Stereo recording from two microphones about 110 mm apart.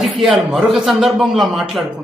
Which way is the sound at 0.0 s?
Centre (ahead or behind).